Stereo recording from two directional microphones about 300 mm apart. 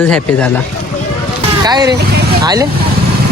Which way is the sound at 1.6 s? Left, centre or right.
Centre.